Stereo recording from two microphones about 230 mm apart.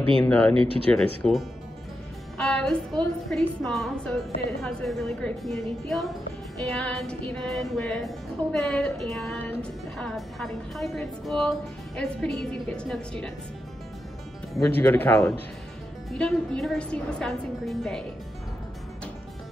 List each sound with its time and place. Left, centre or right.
0.2 s speech: centre
0.6 s speech: right
0.9 s a woman's voice: centre
14.8 s a woman's voice: centre